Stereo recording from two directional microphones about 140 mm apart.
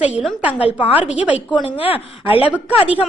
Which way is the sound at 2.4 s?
10° right (ahead or behind).